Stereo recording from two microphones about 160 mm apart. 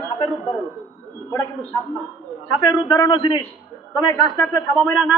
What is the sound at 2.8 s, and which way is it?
Speech, 25° left (ahead or behind).